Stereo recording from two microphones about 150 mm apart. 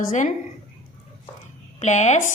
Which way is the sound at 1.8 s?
50° left (ahead or behind).